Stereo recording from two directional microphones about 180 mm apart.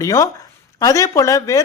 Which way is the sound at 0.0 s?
20° left (ahead or behind).